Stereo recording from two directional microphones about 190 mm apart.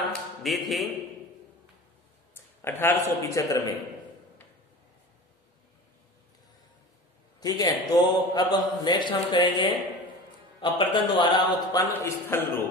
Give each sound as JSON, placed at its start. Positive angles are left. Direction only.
{"t": 0.0, "sound": "a sound", "side_deg": 0}
{"t": 2.3, "sound": "speech", "side_deg": 10}
{"t": 7.3, "sound": "a man's voice", "side_deg": 20}
{"t": 10.6, "sound": "a man's voice", "side_deg": 25}
{"t": 12.0, "sound": "a man's voice", "side_deg": 10}